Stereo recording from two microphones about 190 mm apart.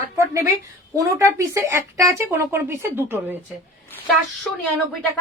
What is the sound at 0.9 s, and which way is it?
Speech, 15° right (ahead or behind).